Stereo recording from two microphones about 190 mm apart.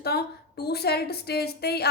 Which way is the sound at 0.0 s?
55° left (ahead or behind).